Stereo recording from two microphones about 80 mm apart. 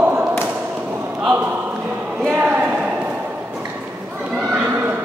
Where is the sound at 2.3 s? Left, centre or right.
Right.